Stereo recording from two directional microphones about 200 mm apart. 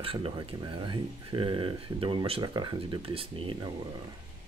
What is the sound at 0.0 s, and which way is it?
Speech, 25° right (ahead or behind).